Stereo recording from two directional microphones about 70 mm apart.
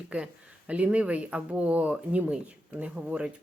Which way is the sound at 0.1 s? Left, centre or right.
Centre.